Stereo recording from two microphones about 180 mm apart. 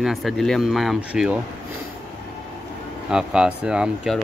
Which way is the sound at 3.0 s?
5° right (ahead or behind).